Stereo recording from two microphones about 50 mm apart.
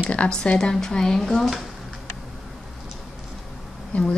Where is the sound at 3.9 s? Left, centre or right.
Left.